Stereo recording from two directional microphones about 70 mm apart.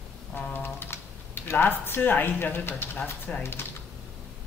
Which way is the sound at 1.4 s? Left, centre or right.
Left.